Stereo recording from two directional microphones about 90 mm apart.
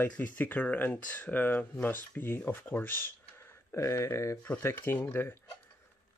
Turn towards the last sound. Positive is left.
turn(degrees=25)  # may be behind; listen again after turning